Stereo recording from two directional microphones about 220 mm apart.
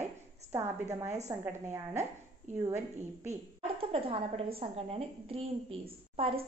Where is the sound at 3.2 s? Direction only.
30° right (ahead or behind).